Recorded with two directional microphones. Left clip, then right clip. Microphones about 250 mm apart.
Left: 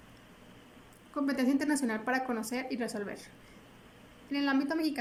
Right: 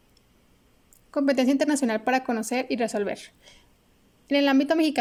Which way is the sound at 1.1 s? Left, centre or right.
Right.